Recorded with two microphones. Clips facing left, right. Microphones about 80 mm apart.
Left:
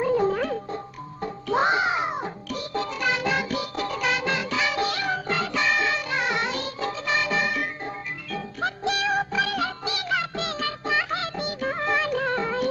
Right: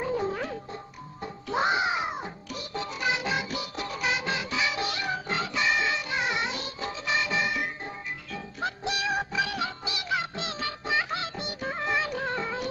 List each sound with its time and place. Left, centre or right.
0.0 s music: left
1.2 s music: left